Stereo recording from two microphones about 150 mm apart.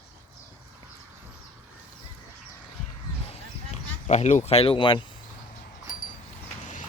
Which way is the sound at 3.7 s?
50° left (ahead or behind).